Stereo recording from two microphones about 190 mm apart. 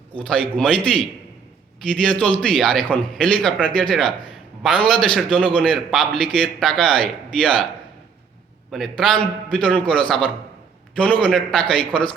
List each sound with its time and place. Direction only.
0.2 s a man's voice: 5° left (ahead or behind)
1.9 s a man's voice: 5° left (ahead or behind)
8.7 s a man's voice: centre (ahead or behind)